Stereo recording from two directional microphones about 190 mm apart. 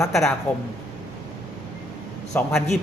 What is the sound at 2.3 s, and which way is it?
Speech, 5° left (ahead or behind).